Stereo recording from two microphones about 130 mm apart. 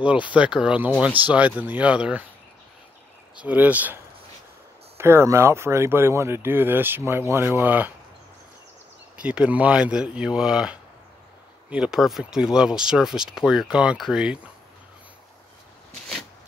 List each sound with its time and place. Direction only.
0.3 s speech: 5° right (ahead or behind)
3.3 s speech: 10° right (ahead or behind)
9.1 s speech: 10° right (ahead or behind)